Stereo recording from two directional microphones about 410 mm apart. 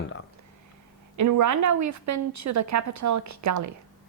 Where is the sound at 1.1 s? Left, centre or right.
Right.